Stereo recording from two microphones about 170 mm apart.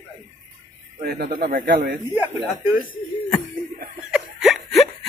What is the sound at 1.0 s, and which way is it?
Speech, 60° right (ahead or behind).